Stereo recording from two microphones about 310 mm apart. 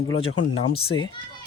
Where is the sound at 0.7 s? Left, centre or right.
Centre.